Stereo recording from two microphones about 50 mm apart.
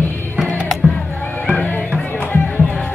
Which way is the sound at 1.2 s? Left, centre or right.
Left.